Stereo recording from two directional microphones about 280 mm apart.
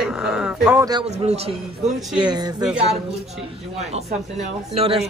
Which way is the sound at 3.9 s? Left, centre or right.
Right.